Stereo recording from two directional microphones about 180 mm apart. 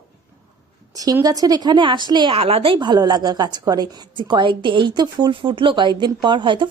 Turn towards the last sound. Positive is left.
turn(degrees=-25)  # may be behind; listen again after turning